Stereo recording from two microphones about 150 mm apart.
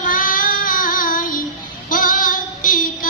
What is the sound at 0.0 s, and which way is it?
Child singing, 65° left (ahead or behind).